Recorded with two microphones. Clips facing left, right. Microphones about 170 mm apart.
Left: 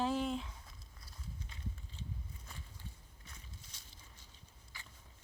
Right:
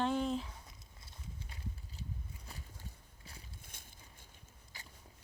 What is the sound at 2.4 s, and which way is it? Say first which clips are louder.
Clip-clop: right 1 dB; 35° right (ahead or behind).